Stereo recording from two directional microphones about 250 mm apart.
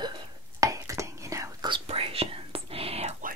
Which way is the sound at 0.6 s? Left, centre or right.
Centre.